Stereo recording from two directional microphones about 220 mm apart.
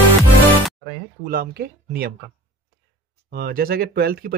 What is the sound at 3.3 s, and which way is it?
Speech, 45° right (ahead or behind).